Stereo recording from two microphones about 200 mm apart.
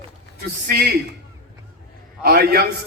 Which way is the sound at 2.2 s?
50° right (ahead or behind).